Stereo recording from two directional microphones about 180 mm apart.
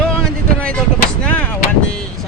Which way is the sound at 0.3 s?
5° left (ahead or behind).